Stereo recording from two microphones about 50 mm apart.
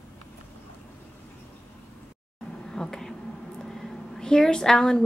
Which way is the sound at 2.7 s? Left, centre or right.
Centre.